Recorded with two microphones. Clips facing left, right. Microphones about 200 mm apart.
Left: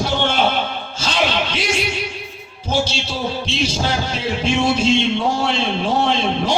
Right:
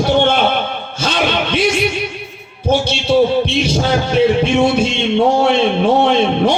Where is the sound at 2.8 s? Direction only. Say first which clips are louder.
Right 11 dB; 60° right (ahead or behind).